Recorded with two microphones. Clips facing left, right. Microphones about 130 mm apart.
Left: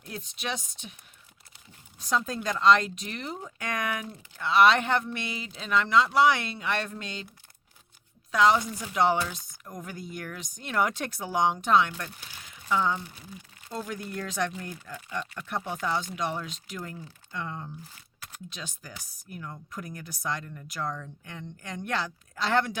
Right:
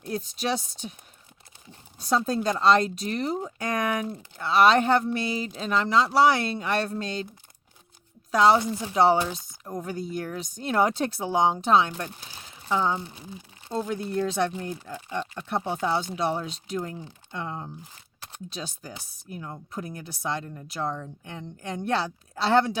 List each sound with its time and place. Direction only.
0.0 s speech: 35° right (ahead or behind)
2.0 s speech: 35° right (ahead or behind)
8.3 s speech: 35° right (ahead or behind)